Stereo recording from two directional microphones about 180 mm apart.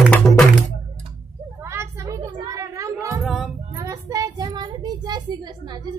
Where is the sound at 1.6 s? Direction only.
15° right (ahead or behind).